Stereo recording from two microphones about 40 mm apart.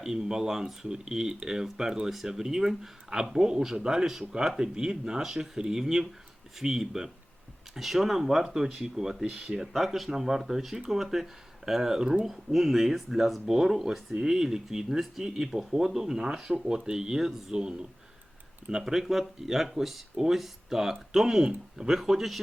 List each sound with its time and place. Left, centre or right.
0.0 s speech: centre